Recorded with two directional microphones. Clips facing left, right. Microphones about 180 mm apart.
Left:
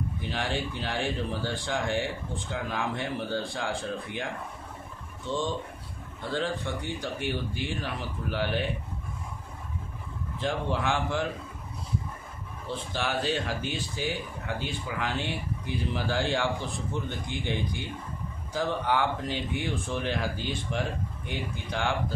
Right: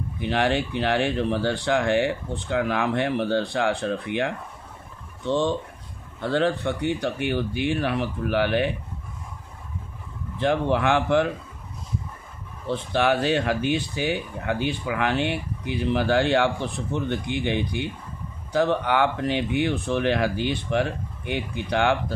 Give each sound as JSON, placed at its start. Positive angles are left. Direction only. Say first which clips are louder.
{"t": 0.2, "sound": "speech", "louder": "right 10 dB", "side_deg": -70}
{"t": 6.3, "sound": "speech", "louder": "right 7 dB", "side_deg": -65}
{"t": 10.4, "sound": "speech", "louder": "right 7 dB", "side_deg": -65}
{"t": 12.6, "sound": "speech", "louder": "right 10 dB", "side_deg": -65}